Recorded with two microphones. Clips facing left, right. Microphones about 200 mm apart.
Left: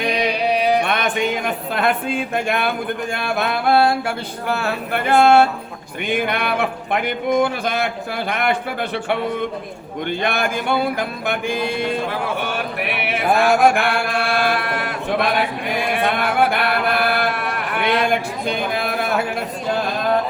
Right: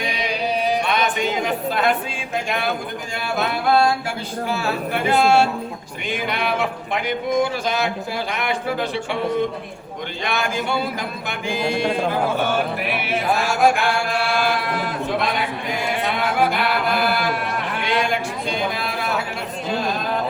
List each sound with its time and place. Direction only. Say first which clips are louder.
0.1 s music: left 6 dB; 65° left (ahead or behind)
1.7 s speech: left 1 dB; 55° left (ahead or behind)
10.2 s speech: left 1 dB; 55° left (ahead or behind)
13.0 s chant: left 6 dB; 60° left (ahead or behind)
16.0 s a sound: left 2 dB; 60° left (ahead or behind)